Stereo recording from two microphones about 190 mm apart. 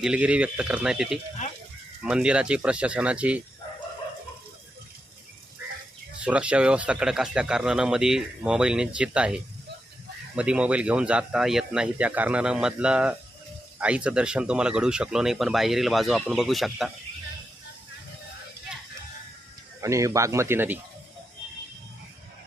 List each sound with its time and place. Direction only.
0.0 s speech: 5° right (ahead or behind)
6.2 s speech: 5° right (ahead or behind)
19.8 s speech: 15° right (ahead or behind)